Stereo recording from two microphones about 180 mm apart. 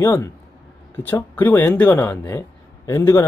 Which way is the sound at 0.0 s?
15° left (ahead or behind).